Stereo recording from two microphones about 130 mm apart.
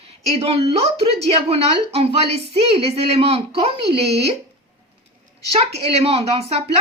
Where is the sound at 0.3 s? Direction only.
50° right (ahead or behind).